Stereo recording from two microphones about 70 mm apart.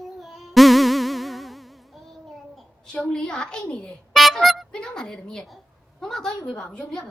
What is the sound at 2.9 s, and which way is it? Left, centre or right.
A woman's voice, centre.